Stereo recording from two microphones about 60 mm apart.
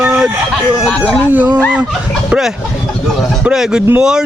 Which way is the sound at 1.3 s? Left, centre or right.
Right.